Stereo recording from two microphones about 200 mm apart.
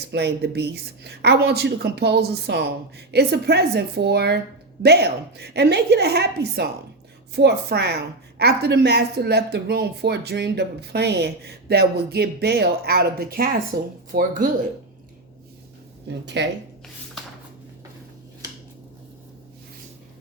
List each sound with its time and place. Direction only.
0.1 s speech: 55° right (ahead or behind)
16.2 s speech: 60° right (ahead or behind)